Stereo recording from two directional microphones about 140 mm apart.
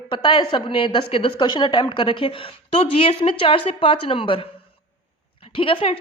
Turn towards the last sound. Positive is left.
turn(degrees=40)  # may be behind; listen again after turning